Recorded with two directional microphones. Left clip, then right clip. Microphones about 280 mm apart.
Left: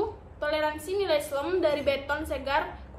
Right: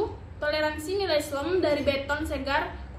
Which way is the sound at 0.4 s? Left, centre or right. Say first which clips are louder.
Right 1 dB; centre.